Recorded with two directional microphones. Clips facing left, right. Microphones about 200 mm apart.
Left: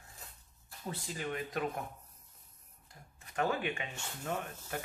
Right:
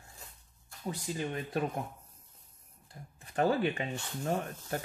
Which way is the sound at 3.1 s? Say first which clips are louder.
Right 5 dB; 35° right (ahead or behind).